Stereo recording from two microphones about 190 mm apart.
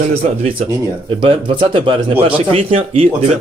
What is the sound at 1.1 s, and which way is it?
Speech, 30° right (ahead or behind).